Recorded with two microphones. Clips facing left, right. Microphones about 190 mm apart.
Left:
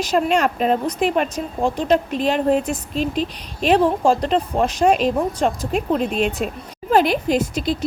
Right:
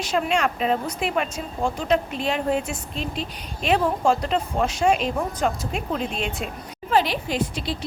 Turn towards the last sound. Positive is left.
turn(degrees=45)  # may be behind; listen again after turning